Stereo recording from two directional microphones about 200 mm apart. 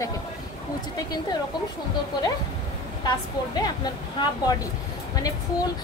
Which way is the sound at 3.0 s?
20° left (ahead or behind).